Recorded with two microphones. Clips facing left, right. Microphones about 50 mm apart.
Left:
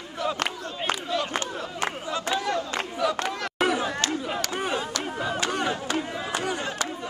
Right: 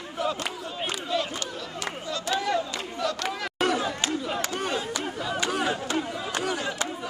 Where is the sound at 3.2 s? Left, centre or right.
Centre.